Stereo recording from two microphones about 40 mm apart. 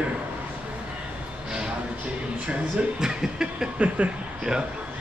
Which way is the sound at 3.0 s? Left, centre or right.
Centre.